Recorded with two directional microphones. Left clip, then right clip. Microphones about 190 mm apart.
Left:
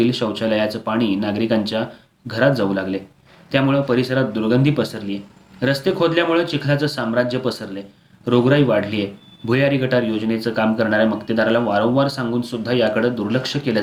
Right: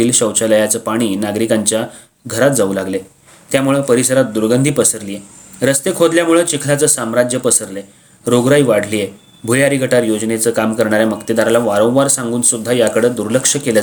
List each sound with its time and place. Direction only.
0.0 s speech: 45° right (ahead or behind)